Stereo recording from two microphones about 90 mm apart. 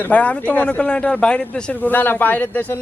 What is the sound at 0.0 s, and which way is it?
Speech, 15° left (ahead or behind).